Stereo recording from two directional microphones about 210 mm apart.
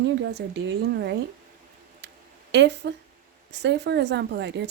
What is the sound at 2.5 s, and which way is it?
Speech, 55° right (ahead or behind).